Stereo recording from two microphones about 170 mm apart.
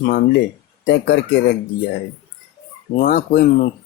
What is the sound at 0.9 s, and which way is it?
Speech, 90° left.